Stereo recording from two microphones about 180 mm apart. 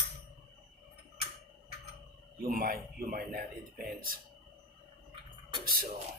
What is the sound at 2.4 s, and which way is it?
A man's voice, 55° right (ahead or behind).